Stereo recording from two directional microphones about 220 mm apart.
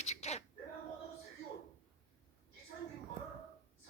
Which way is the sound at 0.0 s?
30° left (ahead or behind).